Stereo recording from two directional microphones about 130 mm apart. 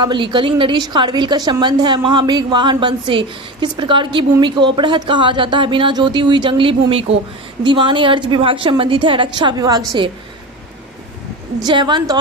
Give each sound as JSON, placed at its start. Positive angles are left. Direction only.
{"t": 0.0, "sound": "a woman's voice", "side_deg": -35}
{"t": 11.6, "sound": "a woman's voice", "side_deg": -35}